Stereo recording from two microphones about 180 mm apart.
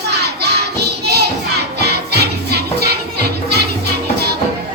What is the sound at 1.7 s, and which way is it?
Music, 65° right (ahead or behind).